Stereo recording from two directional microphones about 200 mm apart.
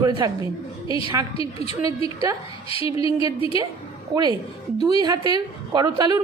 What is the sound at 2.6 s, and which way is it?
Speech, 25° left (ahead or behind).